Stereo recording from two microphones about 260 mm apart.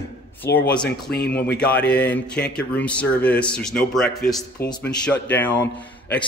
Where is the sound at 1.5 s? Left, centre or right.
Centre.